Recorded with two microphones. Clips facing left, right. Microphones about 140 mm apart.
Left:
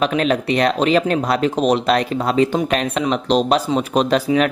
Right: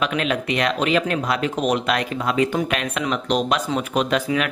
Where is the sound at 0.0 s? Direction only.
35° left (ahead or behind).